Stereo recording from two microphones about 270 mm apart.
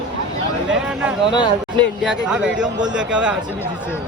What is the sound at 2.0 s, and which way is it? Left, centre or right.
A man's voice, centre.